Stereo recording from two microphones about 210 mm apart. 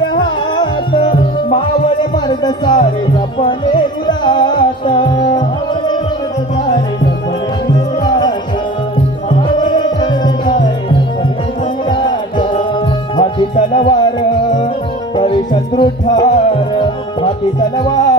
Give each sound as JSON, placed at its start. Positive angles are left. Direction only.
{"t": 0.1, "sound": "music", "side_deg": 20}
{"t": 7.7, "sound": "music", "side_deg": 20}
{"t": 9.7, "sound": "music", "side_deg": 20}
{"t": 11.9, "sound": "music", "side_deg": 20}